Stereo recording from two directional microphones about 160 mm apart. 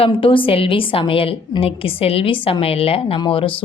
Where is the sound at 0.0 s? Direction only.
35° left (ahead or behind).